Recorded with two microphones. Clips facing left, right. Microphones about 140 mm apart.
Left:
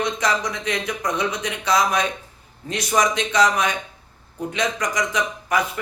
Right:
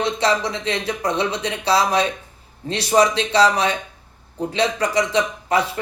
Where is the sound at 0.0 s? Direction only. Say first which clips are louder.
Right 3 dB; 30° right (ahead or behind).